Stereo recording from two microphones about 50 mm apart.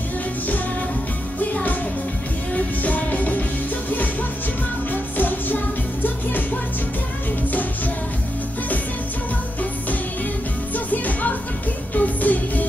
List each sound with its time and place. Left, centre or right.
1.4 s music: left
10.7 s music: left